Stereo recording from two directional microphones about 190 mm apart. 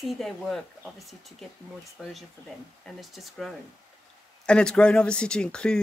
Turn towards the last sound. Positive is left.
turn(degrees=5)  # may be behind; listen again after turning